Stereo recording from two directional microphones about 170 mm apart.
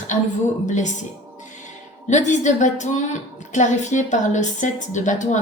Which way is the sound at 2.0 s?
45° left (ahead or behind).